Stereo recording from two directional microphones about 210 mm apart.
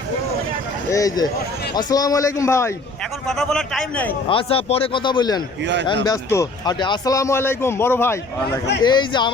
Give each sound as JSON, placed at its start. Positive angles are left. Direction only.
{"t": 0.9, "sound": "speech", "side_deg": 15}
{"t": 3.2, "sound": "a man's voice", "side_deg": 0}
{"t": 4.3, "sound": "a man's voice", "side_deg": 25}
{"t": 8.8, "sound": "a man's voice", "side_deg": 20}